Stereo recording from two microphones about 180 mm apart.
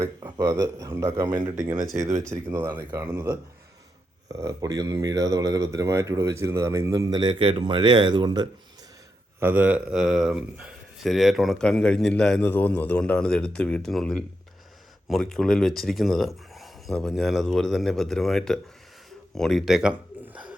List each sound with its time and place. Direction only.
0.0 s speech: 15° right (ahead or behind)
9.4 s speech: 10° right (ahead or behind)
20.2 s a sound: 5° right (ahead or behind)